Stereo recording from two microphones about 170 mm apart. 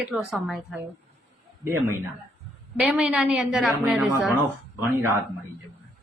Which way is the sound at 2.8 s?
5° right (ahead or behind).